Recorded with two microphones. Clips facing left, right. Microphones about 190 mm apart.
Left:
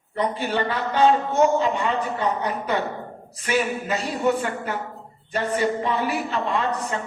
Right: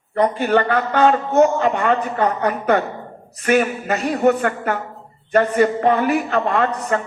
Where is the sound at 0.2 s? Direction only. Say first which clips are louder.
Right 7 dB; 55° right (ahead or behind).